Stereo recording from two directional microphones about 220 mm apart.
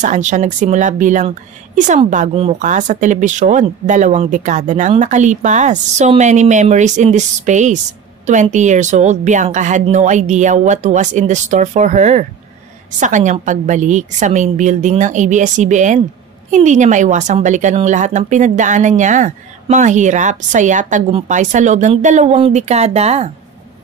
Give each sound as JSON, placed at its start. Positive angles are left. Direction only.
{"t": 0.0, "sound": "a woman's voice", "side_deg": -35}